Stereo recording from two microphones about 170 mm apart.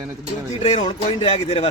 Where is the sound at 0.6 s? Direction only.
30° left (ahead or behind).